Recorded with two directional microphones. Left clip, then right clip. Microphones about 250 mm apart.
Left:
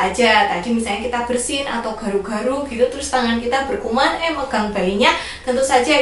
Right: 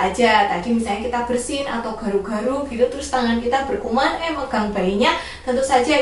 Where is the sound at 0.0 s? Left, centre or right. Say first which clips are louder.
Left 1 dB; centre.